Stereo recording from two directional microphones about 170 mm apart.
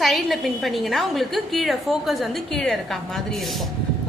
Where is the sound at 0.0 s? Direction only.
Centre (ahead or behind).